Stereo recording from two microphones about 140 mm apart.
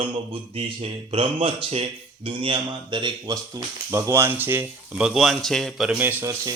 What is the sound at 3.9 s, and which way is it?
Speech, 20° right (ahead or behind).